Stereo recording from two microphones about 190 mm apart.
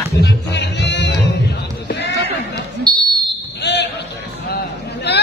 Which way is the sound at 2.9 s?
25° right (ahead or behind).